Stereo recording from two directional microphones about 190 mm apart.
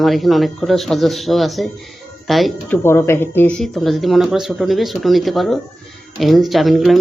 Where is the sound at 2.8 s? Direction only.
15° left (ahead or behind).